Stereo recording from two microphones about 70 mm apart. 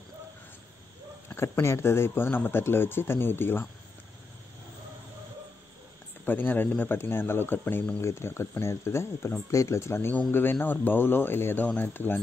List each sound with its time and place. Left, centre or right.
1.6 s speech: left
6.2 s speech: left